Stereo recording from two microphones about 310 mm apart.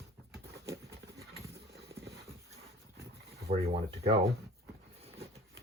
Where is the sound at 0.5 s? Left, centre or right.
Centre.